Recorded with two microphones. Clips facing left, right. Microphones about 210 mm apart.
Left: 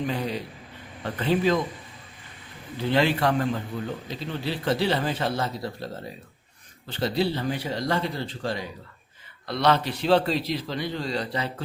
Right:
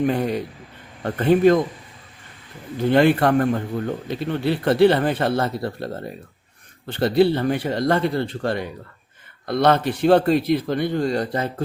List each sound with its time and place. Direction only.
0.0 s speech: 55° right (ahead or behind)
2.7 s a man's voice: 50° right (ahead or behind)